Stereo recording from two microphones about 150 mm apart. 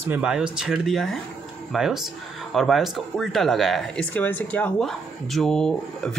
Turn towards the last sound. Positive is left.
turn(degrees=5)  # may be behind; listen again after turning